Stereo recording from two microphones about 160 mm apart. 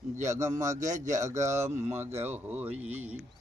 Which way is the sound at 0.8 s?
50° right (ahead or behind).